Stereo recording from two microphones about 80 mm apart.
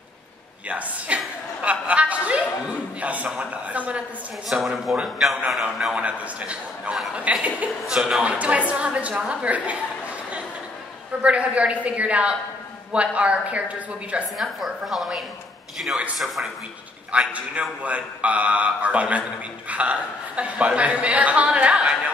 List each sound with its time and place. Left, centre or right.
0.7 s a woman's voice: centre
4.5 s a woman's voice: centre
7.8 s a woman's voice: centre
8.2 s a woman's voice: centre
11.2 s a woman's voice: centre
14.4 s a woman's voice: centre
17.1 s a woman's voice: centre